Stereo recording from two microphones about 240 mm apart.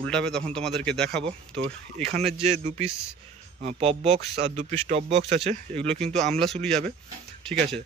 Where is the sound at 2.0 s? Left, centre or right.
Right.